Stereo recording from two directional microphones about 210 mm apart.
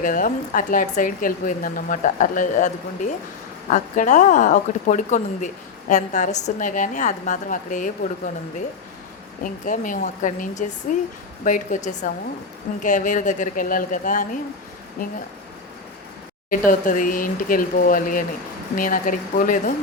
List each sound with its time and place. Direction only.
0.0 s speech: 40° left (ahead or behind)
9.4 s speech: 40° left (ahead or behind)
16.5 s speech: 40° left (ahead or behind)